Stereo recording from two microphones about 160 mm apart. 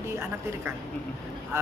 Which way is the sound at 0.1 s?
15° right (ahead or behind).